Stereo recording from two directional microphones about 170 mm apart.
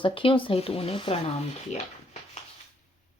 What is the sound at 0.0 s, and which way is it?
Speech, 30° left (ahead or behind).